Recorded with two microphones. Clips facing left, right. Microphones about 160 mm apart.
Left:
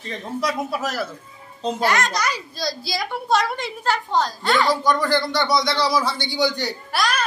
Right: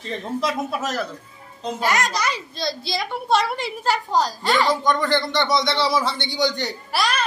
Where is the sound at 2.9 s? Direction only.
Centre (ahead or behind).